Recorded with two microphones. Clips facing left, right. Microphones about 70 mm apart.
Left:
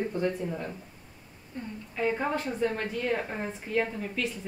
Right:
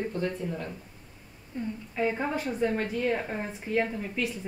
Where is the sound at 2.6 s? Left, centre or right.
Centre.